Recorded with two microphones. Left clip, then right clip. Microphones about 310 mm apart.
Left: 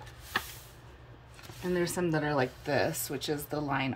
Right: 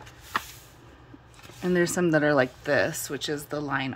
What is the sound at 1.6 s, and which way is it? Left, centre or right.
Speech, centre.